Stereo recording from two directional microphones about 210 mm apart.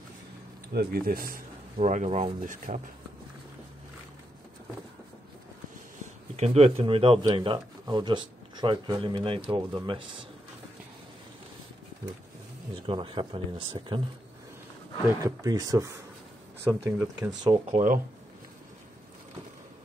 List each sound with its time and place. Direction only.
0.7 s speech: 45° right (ahead or behind)
6.3 s speech: 30° right (ahead or behind)
12.8 s speech: 25° right (ahead or behind)
15.2 s speech: 15° right (ahead or behind)
17.6 s speech: 35° right (ahead or behind)